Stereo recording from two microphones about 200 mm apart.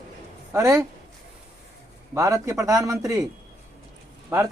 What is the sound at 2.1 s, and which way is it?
Speech, 15° right (ahead or behind).